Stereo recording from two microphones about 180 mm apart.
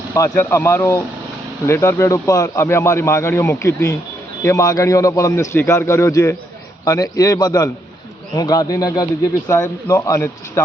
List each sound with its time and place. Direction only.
0.1 s a man's voice: 15° left (ahead or behind)